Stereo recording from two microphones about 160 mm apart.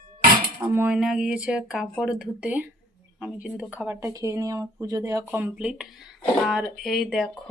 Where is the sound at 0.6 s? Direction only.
10° right (ahead or behind).